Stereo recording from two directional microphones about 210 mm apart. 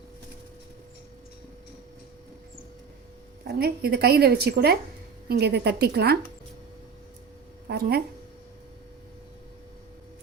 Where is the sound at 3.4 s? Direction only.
50° right (ahead or behind).